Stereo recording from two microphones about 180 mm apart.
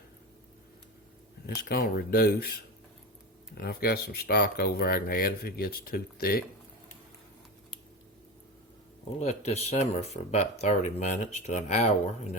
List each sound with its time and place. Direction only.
1.5 s speech: 60° left (ahead or behind)
9.2 s speech: 35° left (ahead or behind)